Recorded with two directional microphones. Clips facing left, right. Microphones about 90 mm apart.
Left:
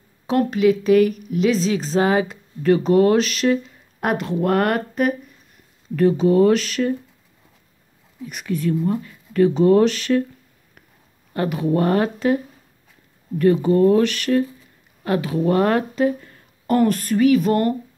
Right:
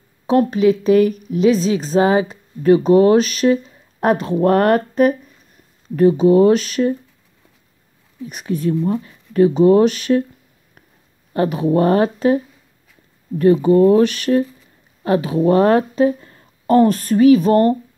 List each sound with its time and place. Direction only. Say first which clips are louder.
0.3 s speech: right 3 dB; 25° right (ahead or behind)
1.5 s speech: right 4 dB; 15° right (ahead or behind)
4.3 s speech: right 5 dB; 35° right (ahead or behind)
5.9 s speech: right 4 dB; 20° right (ahead or behind)
8.3 s speech: right 2 dB; 25° right (ahead or behind)
11.3 s speech: right 4 dB; 25° right (ahead or behind)
13.4 s speech: right 4 dB; 20° right (ahead or behind)